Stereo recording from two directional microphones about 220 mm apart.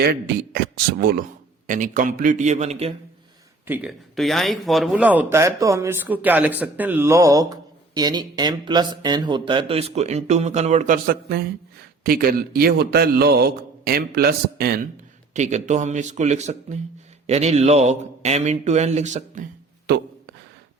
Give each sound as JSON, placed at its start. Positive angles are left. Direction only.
{"t": 0.0, "sound": "a man's voice", "side_deg": -45}
{"t": 3.7, "sound": "a man's voice", "side_deg": -5}
{"t": 15.3, "sound": "a man's voice", "side_deg": -30}